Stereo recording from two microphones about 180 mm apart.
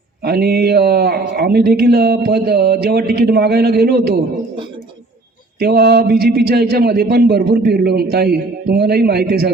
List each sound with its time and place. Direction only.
0.2 s speech: 60° right (ahead or behind)
5.5 s speech: 65° right (ahead or behind)